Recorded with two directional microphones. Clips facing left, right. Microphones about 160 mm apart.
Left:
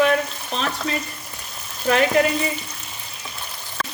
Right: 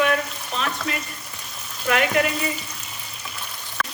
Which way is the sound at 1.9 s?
30° left (ahead or behind).